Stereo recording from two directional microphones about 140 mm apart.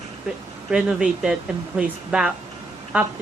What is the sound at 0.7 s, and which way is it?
A woman's voice, 5° right (ahead or behind).